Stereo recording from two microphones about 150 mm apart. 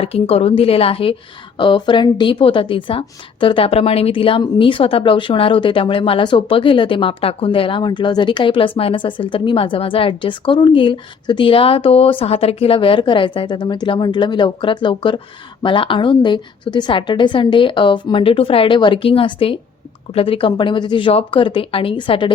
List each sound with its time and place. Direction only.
0.0 s speech: 40° left (ahead or behind)